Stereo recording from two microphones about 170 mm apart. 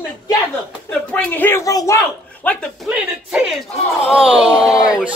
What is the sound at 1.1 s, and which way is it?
Speech, 10° left (ahead or behind).